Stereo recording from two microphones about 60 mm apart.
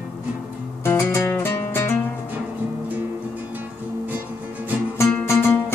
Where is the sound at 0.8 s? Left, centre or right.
Left.